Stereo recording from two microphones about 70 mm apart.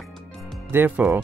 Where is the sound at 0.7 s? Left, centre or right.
Right.